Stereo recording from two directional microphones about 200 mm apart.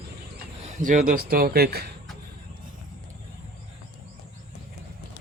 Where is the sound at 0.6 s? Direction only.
40° right (ahead or behind).